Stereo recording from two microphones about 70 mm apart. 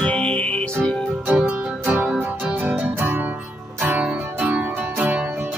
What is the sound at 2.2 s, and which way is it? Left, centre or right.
Music, right.